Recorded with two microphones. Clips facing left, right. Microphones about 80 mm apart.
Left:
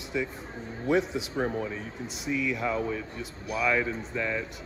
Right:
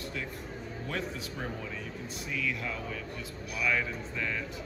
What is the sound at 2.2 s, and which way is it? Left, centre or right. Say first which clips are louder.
Speech: left 6 dB; left.